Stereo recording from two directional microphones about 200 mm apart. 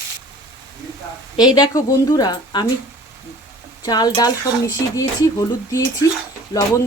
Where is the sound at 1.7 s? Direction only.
15° left (ahead or behind).